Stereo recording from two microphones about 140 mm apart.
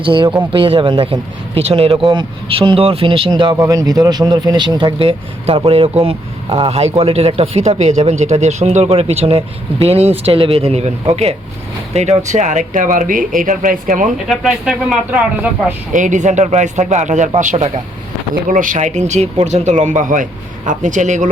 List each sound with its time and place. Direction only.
0.0 s speech: 35° right (ahead or behind)
3.5 s speech: 25° right (ahead or behind); by 14.1 s 70° right (ahead or behind)
14.3 s speech: centre (ahead or behind)
15.9 s speech: 65° right (ahead or behind)
18.4 s speech: 70° right (ahead or behind)